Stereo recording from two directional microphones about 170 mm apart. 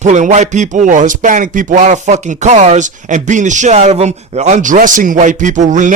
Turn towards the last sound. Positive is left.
turn(degrees=-45)  # may be behind; listen again after turning